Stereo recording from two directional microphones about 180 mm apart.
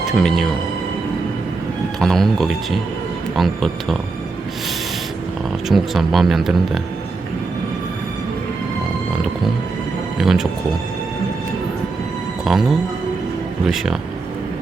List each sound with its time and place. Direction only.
0.0 s speech: centre (ahead or behind)
2.0 s speech: centre (ahead or behind)
5.6 s speech: centre (ahead or behind)
10.2 s speech: centre (ahead or behind)
12.5 s speech: centre (ahead or behind)